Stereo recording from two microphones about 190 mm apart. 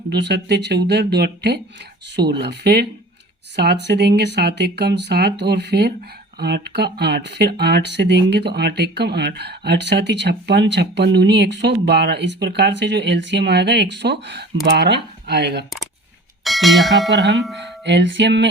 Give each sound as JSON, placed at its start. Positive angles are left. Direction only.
{"t": 0.1, "sound": "speech", "side_deg": -60}
{"t": 16.4, "sound": "speech", "side_deg": 0}
{"t": 17.6, "sound": "music", "side_deg": -70}